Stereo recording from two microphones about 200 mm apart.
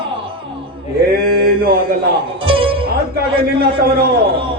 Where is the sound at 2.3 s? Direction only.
25° right (ahead or behind).